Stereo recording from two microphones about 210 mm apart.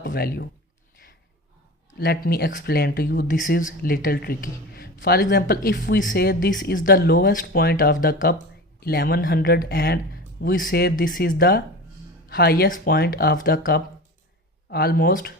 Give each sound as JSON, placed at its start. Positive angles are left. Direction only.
{"t": 0.0, "sound": "speech", "side_deg": 45}
{"t": 2.0, "sound": "speech", "side_deg": 50}